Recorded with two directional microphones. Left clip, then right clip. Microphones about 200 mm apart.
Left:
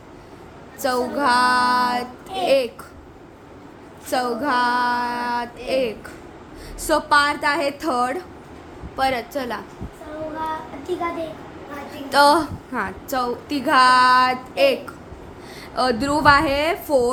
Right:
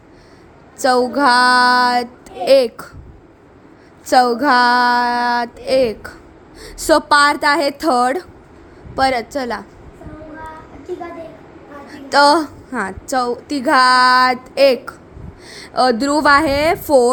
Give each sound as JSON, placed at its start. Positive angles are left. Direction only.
{"t": 0.8, "sound": "a woman's voice", "side_deg": -30}
{"t": 4.0, "sound": "a woman's voice", "side_deg": -35}
{"t": 11.9, "sound": "a woman's voice", "side_deg": -25}